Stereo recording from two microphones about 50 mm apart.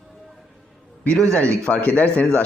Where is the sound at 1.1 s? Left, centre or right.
Centre; by 2.0 s left.